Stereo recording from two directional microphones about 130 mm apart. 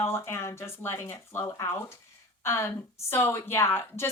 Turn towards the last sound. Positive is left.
turn(degrees=15)  # may be behind; listen again after turning